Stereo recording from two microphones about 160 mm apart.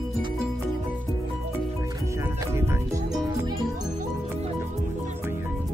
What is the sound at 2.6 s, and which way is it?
Music, 15° right (ahead or behind).